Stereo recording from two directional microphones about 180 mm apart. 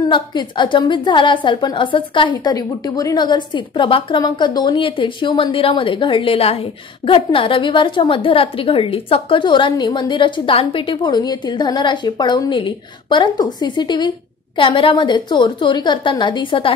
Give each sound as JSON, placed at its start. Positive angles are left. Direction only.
{"t": 0.1, "sound": "a woman's voice", "side_deg": 25}